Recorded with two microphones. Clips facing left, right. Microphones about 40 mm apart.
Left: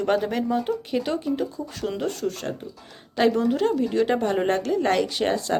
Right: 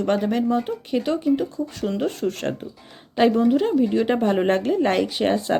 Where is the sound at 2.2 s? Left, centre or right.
Right.